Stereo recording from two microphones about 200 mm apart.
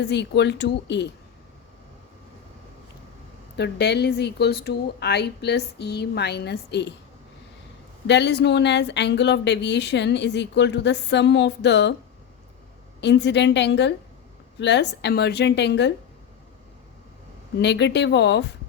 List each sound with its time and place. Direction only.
0.0 s speech: 60° left (ahead or behind)
3.6 s speech: 55° left (ahead or behind)
8.0 s speech: 60° left (ahead or behind)
13.0 s speech: 60° left (ahead or behind)
17.6 s speech: 60° left (ahead or behind)